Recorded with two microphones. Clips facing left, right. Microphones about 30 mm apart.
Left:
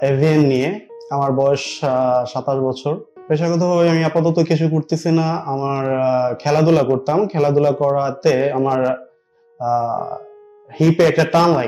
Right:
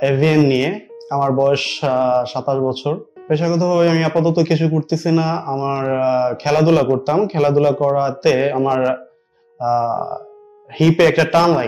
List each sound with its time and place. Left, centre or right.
0.0 s speech: right; by 8.2 s centre
8.2 s speech: right
8.5 s speech: centre
9.6 s speech: right
11.2 s speech: centre